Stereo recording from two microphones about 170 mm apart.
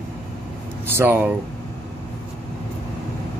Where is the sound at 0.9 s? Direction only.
10° right (ahead or behind).